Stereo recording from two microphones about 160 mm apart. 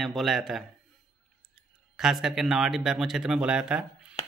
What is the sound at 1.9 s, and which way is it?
Speech, centre (ahead or behind).